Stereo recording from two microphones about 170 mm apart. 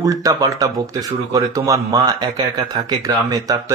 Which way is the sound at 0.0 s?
20° right (ahead or behind).